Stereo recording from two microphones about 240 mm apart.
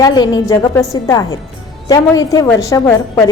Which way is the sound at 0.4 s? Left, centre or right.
Centre.